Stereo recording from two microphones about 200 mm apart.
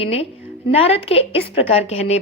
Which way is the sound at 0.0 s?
30° left (ahead or behind).